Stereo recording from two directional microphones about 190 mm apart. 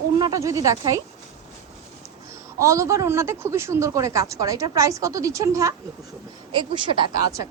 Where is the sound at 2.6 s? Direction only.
15° right (ahead or behind).